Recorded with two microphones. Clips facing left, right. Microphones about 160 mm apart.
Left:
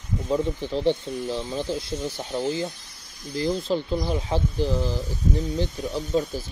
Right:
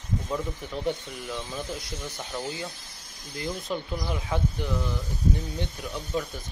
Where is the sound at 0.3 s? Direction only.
30° left (ahead or behind).